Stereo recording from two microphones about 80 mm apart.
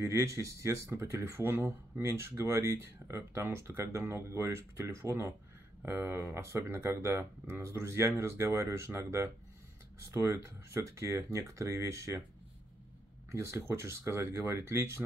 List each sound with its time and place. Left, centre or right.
0.0 s speech: right
13.3 s speech: right